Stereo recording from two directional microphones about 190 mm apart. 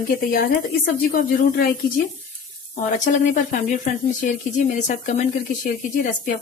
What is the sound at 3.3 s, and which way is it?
Speech, 40° left (ahead or behind).